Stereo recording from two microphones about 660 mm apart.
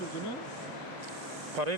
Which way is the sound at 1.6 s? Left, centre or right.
Right.